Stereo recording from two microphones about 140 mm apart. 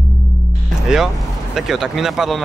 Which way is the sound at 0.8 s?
5° right (ahead or behind).